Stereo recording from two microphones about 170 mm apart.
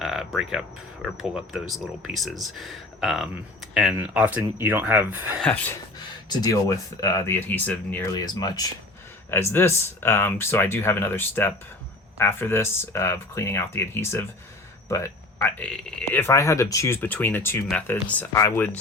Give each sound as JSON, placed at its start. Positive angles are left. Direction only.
{"t": 0.0, "sound": "a sound", "side_deg": 0}
{"t": 1.0, "sound": "speech", "side_deg": -5}
{"t": 5.4, "sound": "speech", "side_deg": 5}
{"t": 6.2, "sound": "speech", "side_deg": 25}
{"t": 8.1, "sound": "speech", "side_deg": 25}